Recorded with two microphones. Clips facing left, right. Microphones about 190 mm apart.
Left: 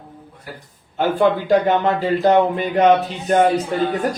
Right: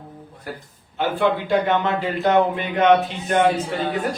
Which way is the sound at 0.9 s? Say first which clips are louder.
Left 4 dB; 40° left (ahead or behind).